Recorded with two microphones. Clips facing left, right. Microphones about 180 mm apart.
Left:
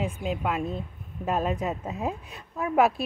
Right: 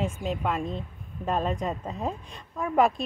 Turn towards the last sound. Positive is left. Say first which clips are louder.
# left 1 dB
turn(degrees=5)  # may be behind; listen again after turning